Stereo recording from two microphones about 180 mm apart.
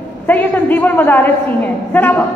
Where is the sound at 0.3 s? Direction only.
10° left (ahead or behind).